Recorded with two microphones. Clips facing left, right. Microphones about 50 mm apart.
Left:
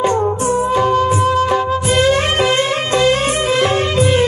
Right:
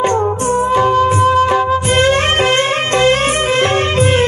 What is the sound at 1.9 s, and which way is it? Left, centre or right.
Music, right.